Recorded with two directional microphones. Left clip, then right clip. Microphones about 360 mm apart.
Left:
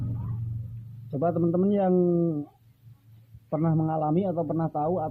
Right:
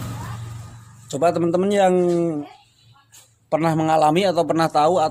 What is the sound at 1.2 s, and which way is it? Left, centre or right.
A man's voice, centre.